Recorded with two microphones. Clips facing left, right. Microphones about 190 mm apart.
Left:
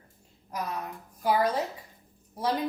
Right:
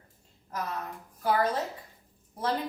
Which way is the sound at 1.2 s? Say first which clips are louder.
Left 1 dB; 10° left (ahead or behind).